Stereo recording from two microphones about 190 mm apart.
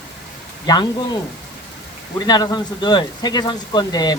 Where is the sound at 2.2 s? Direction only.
20° left (ahead or behind).